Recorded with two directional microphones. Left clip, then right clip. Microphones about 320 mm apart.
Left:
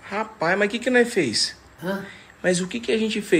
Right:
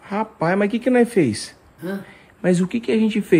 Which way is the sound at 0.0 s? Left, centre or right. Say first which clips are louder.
Right 2 dB; centre.